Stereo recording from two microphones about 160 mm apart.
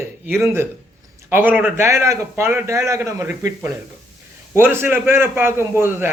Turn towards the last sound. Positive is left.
turn(degrees=-15)  # may be behind; listen again after turning